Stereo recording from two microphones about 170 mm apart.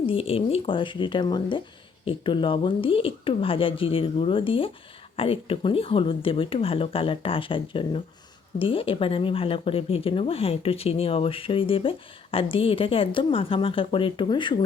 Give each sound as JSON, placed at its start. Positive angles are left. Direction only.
{"t": 0.0, "sound": "speech", "side_deg": 35}